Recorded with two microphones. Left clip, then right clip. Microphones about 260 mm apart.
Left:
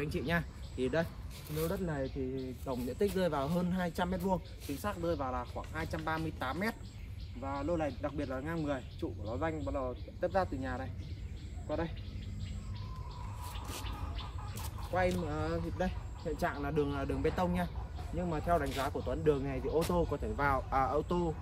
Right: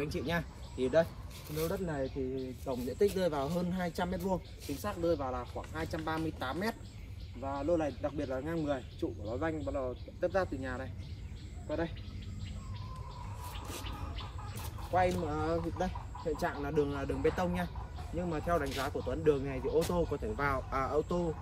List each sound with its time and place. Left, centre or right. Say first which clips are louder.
0.0 s speech: even; centre; by 10.9 s left
15.0 s speech: right 3 dB; centre
16.3 s speech: left 3 dB; centre
16.7 s speech: right 1 dB; left